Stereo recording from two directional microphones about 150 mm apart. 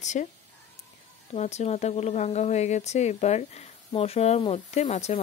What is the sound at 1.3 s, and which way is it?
Speech, 45° left (ahead or behind).